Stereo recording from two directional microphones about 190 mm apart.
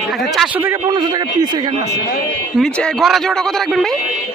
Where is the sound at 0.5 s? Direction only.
10° right (ahead or behind).